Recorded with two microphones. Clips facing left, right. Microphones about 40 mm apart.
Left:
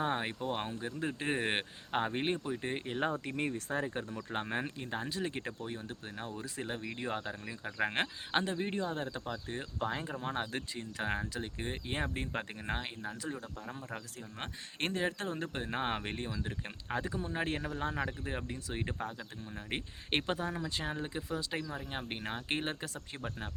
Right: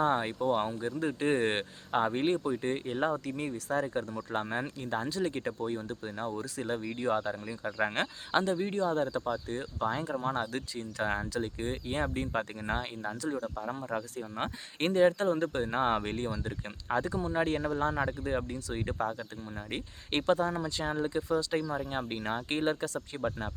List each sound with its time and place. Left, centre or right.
0.0 s speech: centre
3.2 s speech: left
3.7 s speech: left; by 7.9 s centre
8.3 s speech: centre
13.9 s speech: centre
14.8 s speech: centre